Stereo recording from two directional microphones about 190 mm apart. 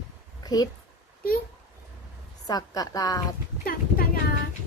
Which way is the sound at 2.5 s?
20° left (ahead or behind).